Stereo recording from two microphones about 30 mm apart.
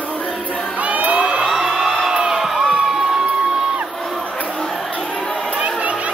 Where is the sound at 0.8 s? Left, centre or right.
Right.